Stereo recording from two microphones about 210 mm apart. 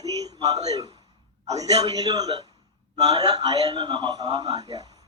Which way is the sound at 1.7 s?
20° right (ahead or behind).